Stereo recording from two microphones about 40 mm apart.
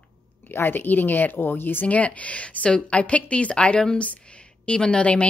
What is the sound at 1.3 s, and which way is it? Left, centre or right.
Speech, left.